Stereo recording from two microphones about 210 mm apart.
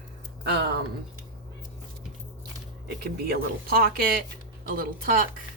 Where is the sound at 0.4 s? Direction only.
50° right (ahead or behind).